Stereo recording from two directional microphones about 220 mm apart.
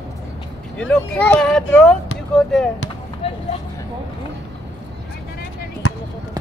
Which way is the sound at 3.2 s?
25° left (ahead or behind).